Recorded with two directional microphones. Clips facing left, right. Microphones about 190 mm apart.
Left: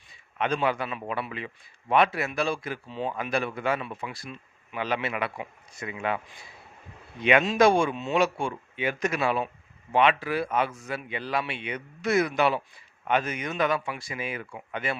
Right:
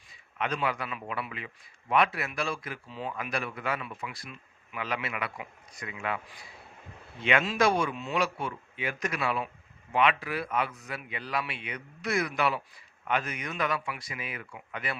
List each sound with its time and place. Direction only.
0.3 s speech: 25° left (ahead or behind)
7.2 s speech: 20° left (ahead or behind)